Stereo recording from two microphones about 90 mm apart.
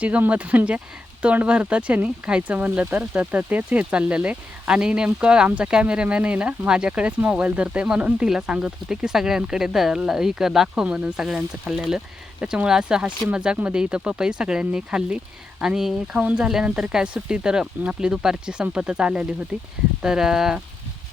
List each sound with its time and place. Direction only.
0.0 s speech: 15° right (ahead or behind)